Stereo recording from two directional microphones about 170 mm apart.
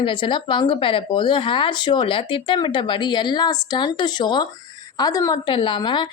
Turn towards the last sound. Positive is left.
turn(degrees=25)  # may be behind; listen again after turning